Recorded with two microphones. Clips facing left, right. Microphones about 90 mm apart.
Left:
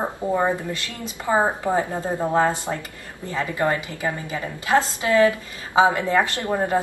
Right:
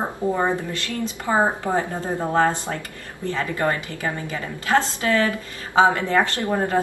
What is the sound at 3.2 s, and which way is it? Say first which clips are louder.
A woman's voice: even; 15° left (ahead or behind).